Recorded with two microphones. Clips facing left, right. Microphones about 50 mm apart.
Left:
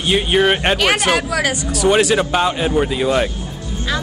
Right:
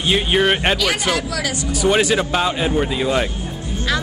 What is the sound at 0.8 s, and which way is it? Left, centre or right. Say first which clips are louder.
Speech: left 4 dB; left.